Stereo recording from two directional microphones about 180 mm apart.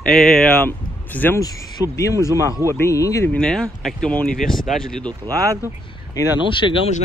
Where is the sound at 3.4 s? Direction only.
5° left (ahead or behind).